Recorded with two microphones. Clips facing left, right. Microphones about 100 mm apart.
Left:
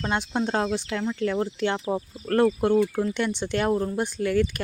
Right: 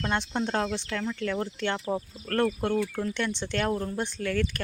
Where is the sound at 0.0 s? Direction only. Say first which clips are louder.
Left 3 dB; 10° left (ahead or behind).